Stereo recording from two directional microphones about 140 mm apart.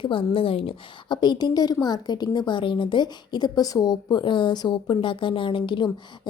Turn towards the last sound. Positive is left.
turn(degrees=35)  # may be behind; listen again after turning